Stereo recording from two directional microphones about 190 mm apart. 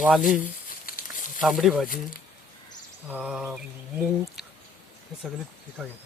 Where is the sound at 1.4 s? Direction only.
Centre (ahead or behind).